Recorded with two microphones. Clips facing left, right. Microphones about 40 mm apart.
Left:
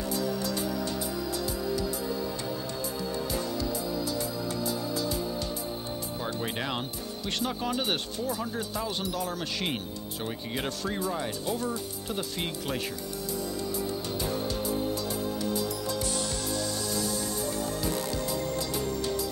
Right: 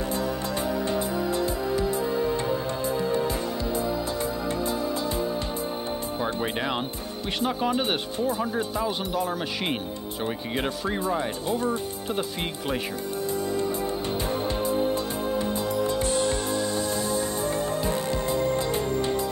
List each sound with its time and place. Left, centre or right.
0.9 s music: right
6.2 s speech: centre
13.3 s music: right